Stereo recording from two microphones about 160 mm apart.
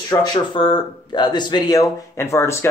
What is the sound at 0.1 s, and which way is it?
Speech, 25° left (ahead or behind).